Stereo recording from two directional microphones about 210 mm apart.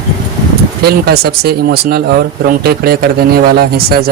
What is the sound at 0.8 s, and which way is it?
Speech, 50° right (ahead or behind).